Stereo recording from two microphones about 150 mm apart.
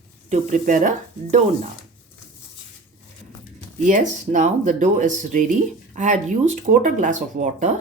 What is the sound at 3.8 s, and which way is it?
Speech, 55° right (ahead or behind).